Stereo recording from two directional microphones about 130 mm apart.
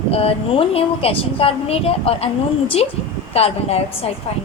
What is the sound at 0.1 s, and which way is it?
A woman's voice, 50° left (ahead or behind).